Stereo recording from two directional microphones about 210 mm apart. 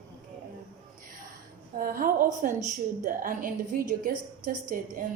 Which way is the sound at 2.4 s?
40° right (ahead or behind).